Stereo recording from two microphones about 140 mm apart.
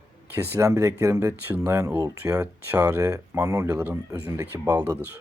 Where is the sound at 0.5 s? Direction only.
20° right (ahead or behind).